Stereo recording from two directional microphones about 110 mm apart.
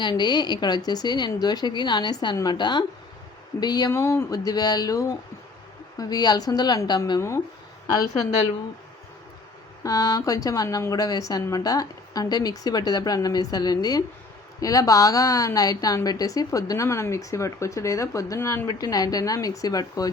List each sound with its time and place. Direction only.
0.0 s a woman's voice: 45° left (ahead or behind)
3.9 s a woman's voice: 25° left (ahead or behind); by 7.0 s 40° left (ahead or behind)
9.8 s a woman's voice: 35° left (ahead or behind)
18.7 s a woman's voice: 35° left (ahead or behind)